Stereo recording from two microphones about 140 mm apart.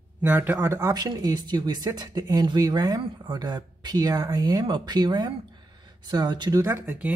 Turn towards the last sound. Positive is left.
turn(degrees=-15)  # may be behind; listen again after turning